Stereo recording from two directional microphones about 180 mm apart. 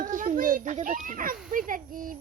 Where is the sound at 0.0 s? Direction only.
45° right (ahead or behind).